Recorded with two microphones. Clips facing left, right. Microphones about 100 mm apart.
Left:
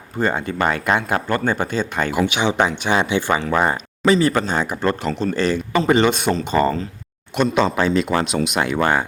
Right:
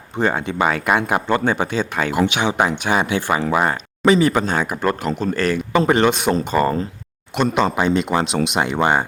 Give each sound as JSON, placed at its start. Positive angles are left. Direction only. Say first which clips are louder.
{"t": 0.2, "sound": "speech", "louder": "right 1 dB", "side_deg": -10}
{"t": 6.5, "sound": "speech", "louder": "left 1 dB", "side_deg": -5}
{"t": 7.5, "sound": "speech", "louder": "even", "side_deg": -15}